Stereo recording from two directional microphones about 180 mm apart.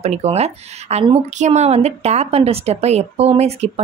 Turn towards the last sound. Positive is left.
turn(degrees=-35)  # may be behind; listen again after turning